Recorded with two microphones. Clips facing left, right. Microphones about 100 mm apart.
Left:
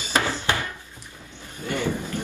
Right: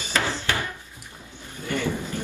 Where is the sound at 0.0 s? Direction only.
20° left (ahead or behind).